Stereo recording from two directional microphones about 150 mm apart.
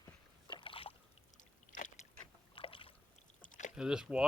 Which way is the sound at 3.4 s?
55° left (ahead or behind).